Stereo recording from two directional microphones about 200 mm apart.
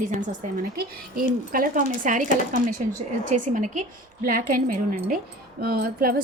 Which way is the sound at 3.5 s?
40° right (ahead or behind).